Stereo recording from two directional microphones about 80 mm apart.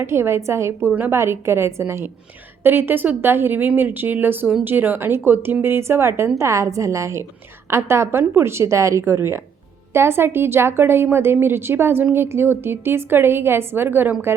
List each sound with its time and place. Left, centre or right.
0.0 s a woman's voice: right